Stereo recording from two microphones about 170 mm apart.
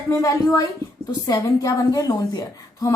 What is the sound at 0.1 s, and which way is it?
A woman's voice, 20° left (ahead or behind).